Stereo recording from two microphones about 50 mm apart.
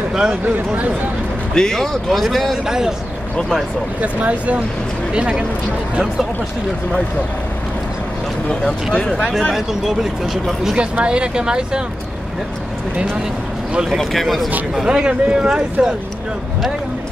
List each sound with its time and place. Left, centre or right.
0.1 s speech: centre
1.5 s speech: centre
2.6 s speech: centre
4.0 s speech: right
8.9 s speech: centre
9.3 s speech: centre
10.8 s speech: right
13.9 s speech: centre
14.9 s speech: centre